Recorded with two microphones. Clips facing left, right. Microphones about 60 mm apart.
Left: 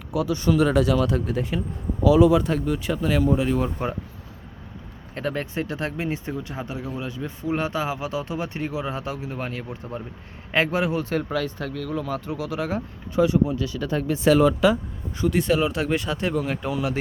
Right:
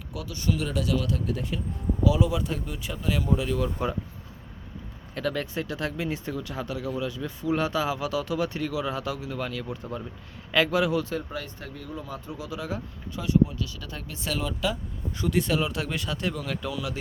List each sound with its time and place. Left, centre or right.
0.1 s speech: centre
0.5 s speech: left
0.8 s speech: left
1.0 s speech: left
2.0 s speech: left
3.2 s speech: left
5.1 s speech: left
11.1 s speech: left
13.5 s speech: left
15.1 s speech: centre; by 17.0 s left